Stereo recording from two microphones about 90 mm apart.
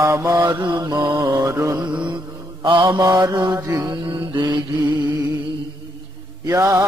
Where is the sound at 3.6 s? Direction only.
35° right (ahead or behind).